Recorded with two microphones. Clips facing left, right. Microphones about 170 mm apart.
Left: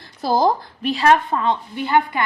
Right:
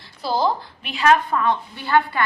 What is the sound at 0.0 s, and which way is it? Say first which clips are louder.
A woman's voice: left 4 dB; 45° left (ahead or behind).